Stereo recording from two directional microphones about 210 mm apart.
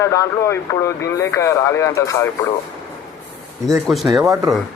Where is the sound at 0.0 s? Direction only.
15° left (ahead or behind).